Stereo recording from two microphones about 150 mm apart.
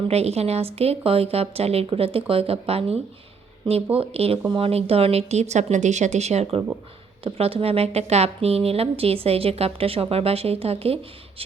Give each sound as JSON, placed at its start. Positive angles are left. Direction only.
{"t": 0.1, "sound": "a woman's voice", "side_deg": -45}